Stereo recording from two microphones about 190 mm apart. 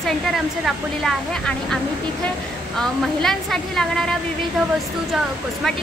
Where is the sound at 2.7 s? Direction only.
Centre (ahead or behind).